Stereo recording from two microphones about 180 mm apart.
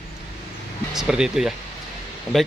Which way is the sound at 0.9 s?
5° right (ahead or behind).